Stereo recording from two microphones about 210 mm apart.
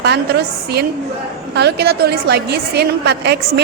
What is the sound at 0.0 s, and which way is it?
A woman's voice, 50° right (ahead or behind).